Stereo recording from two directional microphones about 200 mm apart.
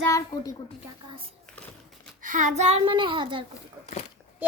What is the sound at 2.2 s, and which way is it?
Speech, 40° right (ahead or behind).